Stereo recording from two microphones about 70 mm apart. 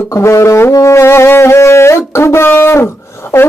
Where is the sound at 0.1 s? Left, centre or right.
Left.